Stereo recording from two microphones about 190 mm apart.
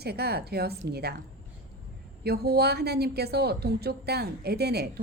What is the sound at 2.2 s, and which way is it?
A woman's voice, 55° right (ahead or behind).